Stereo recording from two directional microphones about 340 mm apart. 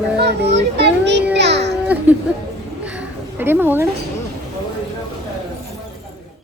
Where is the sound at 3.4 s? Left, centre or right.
Centre.